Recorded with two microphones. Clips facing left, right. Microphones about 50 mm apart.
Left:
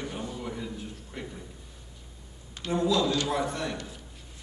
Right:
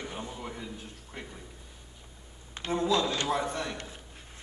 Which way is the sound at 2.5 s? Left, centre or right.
Right.